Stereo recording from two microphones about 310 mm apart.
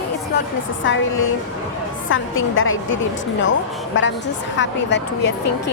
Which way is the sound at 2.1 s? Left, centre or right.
Left.